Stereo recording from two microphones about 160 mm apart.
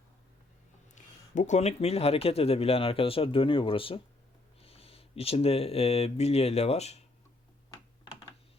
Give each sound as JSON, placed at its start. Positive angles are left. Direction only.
{"t": 1.4, "sound": "speech", "side_deg": 45}
{"t": 7.7, "sound": "computer keyboard", "side_deg": 30}